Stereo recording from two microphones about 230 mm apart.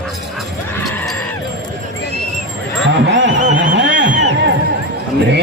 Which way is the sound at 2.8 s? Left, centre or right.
Right.